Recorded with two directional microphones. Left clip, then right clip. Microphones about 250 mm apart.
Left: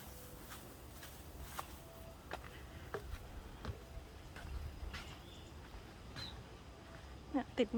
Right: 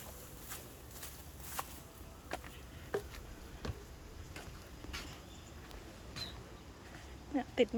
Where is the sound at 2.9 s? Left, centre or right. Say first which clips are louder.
Right 7 dB; right.